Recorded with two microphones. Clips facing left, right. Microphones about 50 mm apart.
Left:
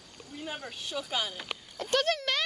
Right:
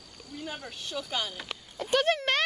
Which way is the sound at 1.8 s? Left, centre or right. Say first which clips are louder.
Right 2 dB; centre.